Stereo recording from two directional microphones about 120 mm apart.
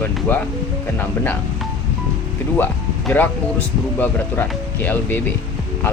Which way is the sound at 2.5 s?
15° left (ahead or behind).